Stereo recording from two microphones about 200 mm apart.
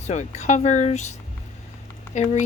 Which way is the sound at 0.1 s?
35° left (ahead or behind).